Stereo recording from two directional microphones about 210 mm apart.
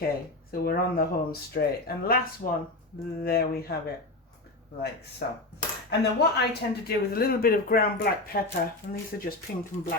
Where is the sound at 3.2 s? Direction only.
45° left (ahead or behind).